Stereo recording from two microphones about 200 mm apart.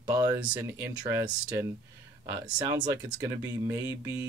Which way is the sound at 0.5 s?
10° right (ahead or behind).